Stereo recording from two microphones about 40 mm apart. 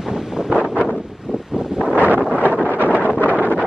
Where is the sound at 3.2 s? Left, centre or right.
Right.